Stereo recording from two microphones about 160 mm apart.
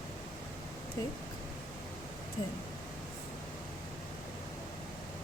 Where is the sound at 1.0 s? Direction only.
20° left (ahead or behind).